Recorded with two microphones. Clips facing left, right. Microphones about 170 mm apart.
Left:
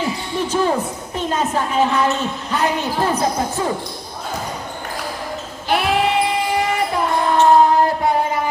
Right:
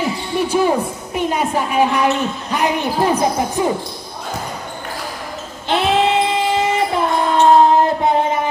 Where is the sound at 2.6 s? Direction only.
15° right (ahead or behind).